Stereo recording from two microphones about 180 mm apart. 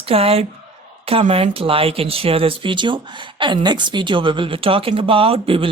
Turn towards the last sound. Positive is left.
turn(degrees=-30)  # may be behind; listen again after turning